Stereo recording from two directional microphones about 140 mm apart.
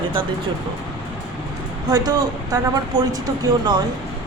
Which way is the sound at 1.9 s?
25° right (ahead or behind).